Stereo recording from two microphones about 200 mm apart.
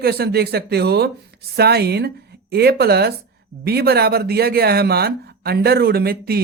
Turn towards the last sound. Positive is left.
turn(degrees=-50)  # may be behind; listen again after turning